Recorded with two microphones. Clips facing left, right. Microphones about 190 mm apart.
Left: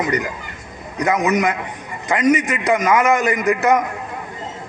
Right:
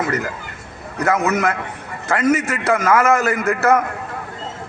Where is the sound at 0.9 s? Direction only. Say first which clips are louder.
Even; 15° left (ahead or behind).